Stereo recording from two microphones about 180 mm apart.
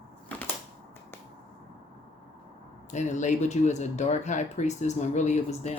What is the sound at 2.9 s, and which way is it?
Speech, 40° left (ahead or behind).